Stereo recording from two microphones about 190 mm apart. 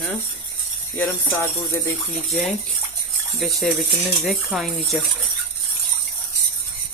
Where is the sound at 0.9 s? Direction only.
10° left (ahead or behind).